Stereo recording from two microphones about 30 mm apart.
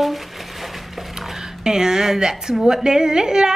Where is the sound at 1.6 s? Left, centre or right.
Centre.